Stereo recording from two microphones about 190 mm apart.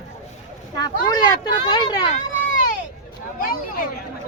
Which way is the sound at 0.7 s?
20° left (ahead or behind).